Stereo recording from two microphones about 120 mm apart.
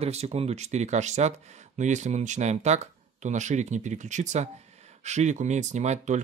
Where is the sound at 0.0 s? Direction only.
60° right (ahead or behind).